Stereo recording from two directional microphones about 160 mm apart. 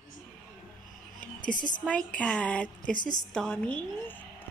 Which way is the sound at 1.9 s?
5° left (ahead or behind).